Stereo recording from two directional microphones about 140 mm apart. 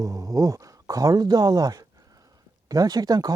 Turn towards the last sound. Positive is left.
turn(degrees=-25)  # may be behind; listen again after turning